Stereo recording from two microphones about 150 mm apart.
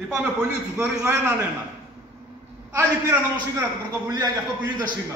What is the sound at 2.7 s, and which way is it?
Speech, 20° right (ahead or behind).